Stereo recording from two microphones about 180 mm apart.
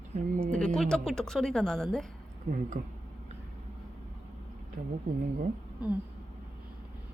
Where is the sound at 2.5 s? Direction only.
45° right (ahead or behind).